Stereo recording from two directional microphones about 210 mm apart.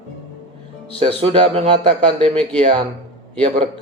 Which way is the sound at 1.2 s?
30° right (ahead or behind).